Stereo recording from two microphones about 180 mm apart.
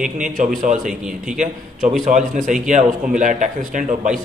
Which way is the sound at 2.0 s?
45° right (ahead or behind).